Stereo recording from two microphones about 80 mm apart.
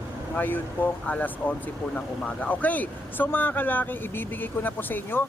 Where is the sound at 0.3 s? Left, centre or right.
Left.